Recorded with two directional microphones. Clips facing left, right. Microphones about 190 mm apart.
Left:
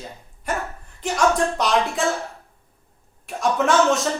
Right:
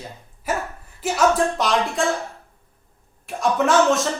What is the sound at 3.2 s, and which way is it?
Music, centre (ahead or behind).